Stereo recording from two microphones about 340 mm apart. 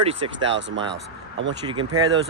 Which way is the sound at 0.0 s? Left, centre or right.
Centre.